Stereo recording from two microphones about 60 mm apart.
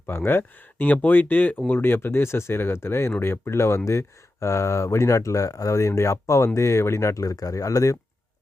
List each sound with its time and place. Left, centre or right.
0.1 s speech: left